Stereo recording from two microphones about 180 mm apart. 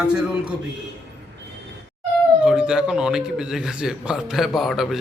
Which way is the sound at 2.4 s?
5° right (ahead or behind).